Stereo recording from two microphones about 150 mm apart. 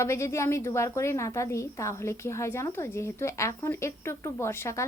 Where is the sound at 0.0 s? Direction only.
20° left (ahead or behind).